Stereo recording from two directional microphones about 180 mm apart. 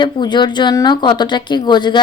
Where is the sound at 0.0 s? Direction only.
25° left (ahead or behind).